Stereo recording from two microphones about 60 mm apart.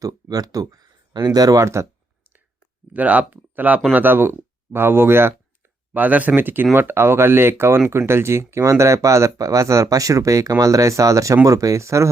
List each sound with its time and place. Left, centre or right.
0.0 s speech: right
1.6 s speech: right
2.9 s speech: right
5.9 s speech: right
11.4 s speech: right